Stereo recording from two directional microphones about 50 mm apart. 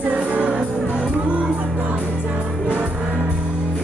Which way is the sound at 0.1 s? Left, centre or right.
Right.